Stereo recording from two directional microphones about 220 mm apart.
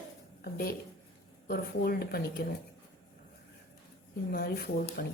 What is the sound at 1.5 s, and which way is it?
Speech, 45° left (ahead or behind).